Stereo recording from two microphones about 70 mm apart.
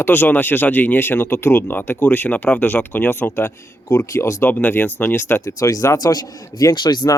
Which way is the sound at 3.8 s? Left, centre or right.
Left.